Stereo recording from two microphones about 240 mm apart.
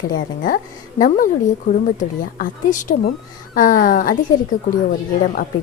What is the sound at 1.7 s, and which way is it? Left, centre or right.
A woman's voice, left.